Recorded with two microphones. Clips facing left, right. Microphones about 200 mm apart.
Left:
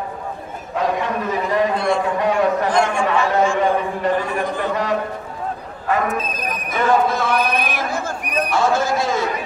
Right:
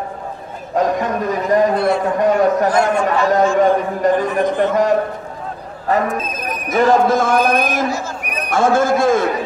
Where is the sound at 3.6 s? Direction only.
45° right (ahead or behind).